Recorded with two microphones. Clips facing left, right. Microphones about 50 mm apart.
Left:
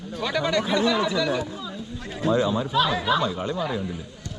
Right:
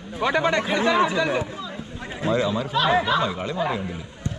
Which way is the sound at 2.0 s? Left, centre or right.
Right.